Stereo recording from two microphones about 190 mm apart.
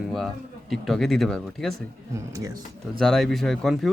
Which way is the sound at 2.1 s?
20° right (ahead or behind).